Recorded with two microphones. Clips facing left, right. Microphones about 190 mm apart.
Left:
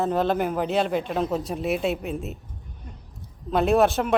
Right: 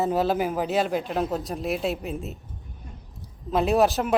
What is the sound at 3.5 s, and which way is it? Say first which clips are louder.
Speech: left 1 dB; centre (ahead or behind).